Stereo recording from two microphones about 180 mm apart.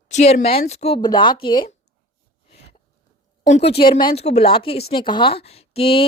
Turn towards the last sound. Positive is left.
turn(degrees=30)  # may be behind; listen again after turning